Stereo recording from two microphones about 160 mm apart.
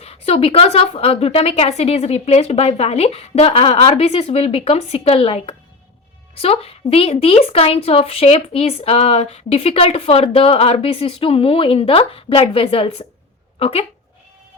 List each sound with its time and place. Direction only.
0.0 s a woman's voice: 40° left (ahead or behind)